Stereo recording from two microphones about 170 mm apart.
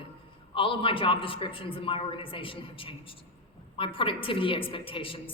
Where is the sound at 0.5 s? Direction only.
30° left (ahead or behind).